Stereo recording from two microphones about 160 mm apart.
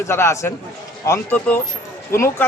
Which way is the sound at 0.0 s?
15° left (ahead or behind).